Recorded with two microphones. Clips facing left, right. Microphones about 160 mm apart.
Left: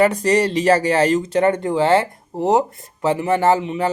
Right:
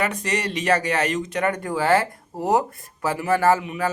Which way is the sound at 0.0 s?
35° left (ahead or behind).